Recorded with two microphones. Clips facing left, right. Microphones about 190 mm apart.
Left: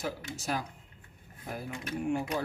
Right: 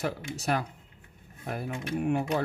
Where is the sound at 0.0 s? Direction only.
65° right (ahead or behind).